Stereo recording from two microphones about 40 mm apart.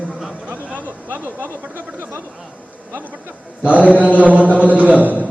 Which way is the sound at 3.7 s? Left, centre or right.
Right.